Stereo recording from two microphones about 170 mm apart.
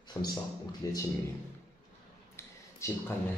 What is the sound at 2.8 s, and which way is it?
Speech, 15° left (ahead or behind).